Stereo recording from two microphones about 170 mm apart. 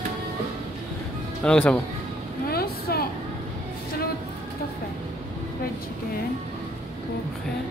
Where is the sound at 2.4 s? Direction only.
65° left (ahead or behind).